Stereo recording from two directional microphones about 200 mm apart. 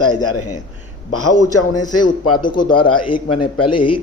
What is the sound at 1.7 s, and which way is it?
Speech, 20° left (ahead or behind).